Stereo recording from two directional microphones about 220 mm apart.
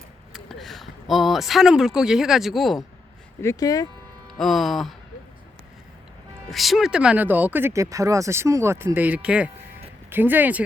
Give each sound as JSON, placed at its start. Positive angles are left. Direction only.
{"t": 0.3, "sound": "speech", "side_deg": 0}
{"t": 3.4, "sound": "speech", "side_deg": 15}
{"t": 4.4, "sound": "speech", "side_deg": 0}
{"t": 6.5, "sound": "speech", "side_deg": 0}